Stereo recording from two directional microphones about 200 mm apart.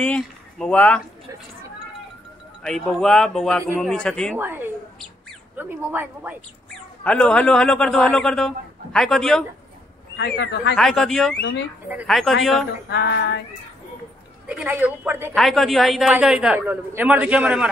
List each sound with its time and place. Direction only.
0.0 s speech: 5° left (ahead or behind)
2.6 s a man's voice: centre (ahead or behind)
4.4 s a woman's voice: 10° right (ahead or behind)
7.0 s a man's voice: 5° left (ahead or behind)
10.1 s speech: 60° left (ahead or behind)
10.8 s a man's voice: centre (ahead or behind)
12.9 s speech: 60° left (ahead or behind)
14.5 s a woman's voice: 10° right (ahead or behind)
15.3 s a man's voice: centre (ahead or behind)